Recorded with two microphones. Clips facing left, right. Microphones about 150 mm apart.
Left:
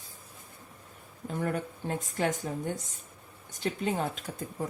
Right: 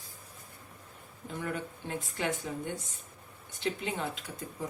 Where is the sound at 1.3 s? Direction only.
45° left (ahead or behind).